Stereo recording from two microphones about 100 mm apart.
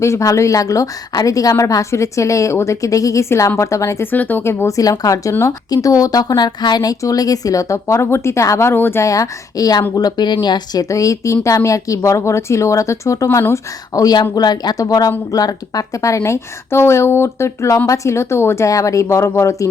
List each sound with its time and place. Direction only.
0.0 s a woman's voice: 30° left (ahead or behind)